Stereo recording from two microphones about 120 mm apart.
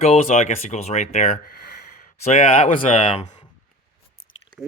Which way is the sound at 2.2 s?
60° left (ahead or behind).